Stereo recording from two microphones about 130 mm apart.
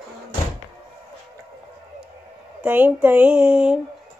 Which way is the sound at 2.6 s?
15° right (ahead or behind).